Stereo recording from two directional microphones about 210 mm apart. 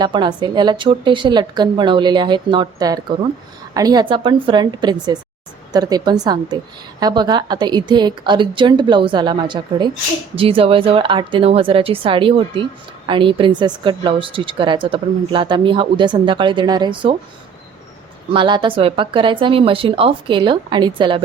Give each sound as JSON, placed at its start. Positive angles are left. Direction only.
{"t": 0.0, "sound": "a woman's voice", "side_deg": -20}
{"t": 18.3, "sound": "a woman's voice", "side_deg": -20}